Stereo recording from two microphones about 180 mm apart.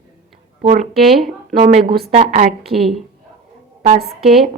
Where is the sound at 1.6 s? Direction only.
40° right (ahead or behind).